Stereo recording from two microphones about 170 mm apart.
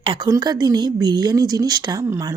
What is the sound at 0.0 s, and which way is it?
A woman's voice, 30° right (ahead or behind).